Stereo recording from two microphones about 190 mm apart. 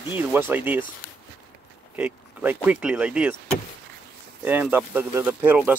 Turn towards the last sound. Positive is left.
turn(degrees=-10)  # may be behind; listen again after turning